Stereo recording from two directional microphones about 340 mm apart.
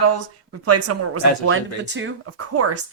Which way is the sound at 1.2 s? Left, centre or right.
Left.